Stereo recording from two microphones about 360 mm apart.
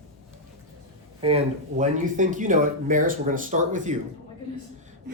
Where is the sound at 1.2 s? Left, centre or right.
Centre.